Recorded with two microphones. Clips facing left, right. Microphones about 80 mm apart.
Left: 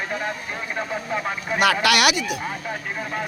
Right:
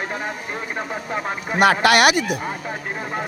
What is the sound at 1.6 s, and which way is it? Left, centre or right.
Speech, right.